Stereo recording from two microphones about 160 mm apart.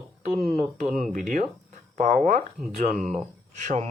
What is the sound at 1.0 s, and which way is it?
Speech, 55° right (ahead or behind).